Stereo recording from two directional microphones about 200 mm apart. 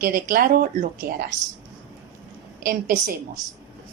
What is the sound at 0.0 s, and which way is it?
Speech, 45° right (ahead or behind).